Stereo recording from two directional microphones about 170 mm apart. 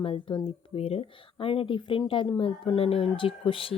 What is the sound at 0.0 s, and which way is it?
Speech, 30° left (ahead or behind).